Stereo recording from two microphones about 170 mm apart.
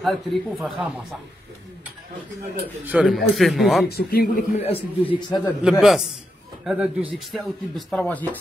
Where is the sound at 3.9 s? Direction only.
65° left (ahead or behind).